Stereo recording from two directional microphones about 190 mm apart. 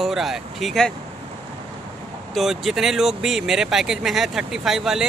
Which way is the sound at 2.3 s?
Centre (ahead or behind).